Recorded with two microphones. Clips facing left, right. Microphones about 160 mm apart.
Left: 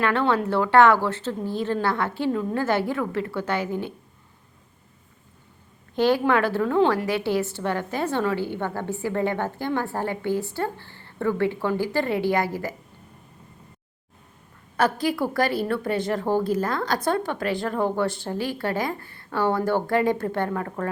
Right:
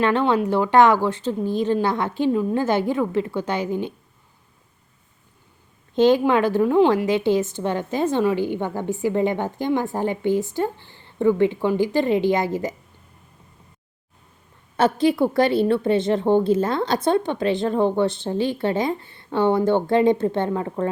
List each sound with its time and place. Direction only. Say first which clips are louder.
0.0 s a woman's voice: right 3 dB; 20° right (ahead or behind)
5.9 s a woman's voice: right 4 dB; 20° right (ahead or behind)
14.8 s a woman's voice: right 5 dB; 25° right (ahead or behind)